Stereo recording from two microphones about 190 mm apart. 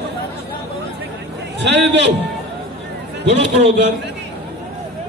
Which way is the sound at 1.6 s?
65° right (ahead or behind).